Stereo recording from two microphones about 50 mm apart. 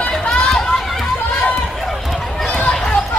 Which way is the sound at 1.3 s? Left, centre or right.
Left.